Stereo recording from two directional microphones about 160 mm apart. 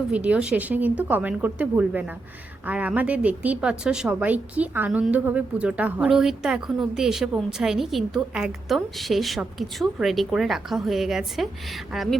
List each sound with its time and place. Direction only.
0.1 s a woman's voice: 5° right (ahead or behind)